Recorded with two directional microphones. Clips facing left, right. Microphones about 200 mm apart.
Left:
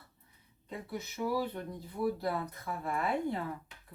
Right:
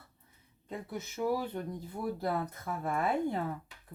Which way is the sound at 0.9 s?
50° right (ahead or behind).